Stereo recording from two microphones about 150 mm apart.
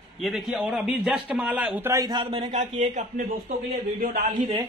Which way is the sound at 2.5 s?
55° right (ahead or behind).